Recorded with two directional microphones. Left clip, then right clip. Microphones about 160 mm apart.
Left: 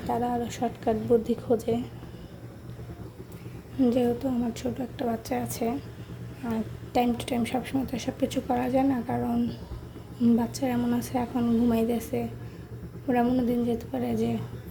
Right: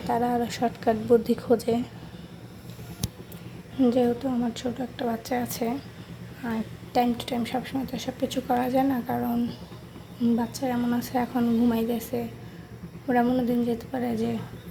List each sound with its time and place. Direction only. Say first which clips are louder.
0.1 s a woman's voice: right 3 dB; 10° left (ahead or behind)
3.8 s a woman's voice: right 2 dB; 15° left (ahead or behind)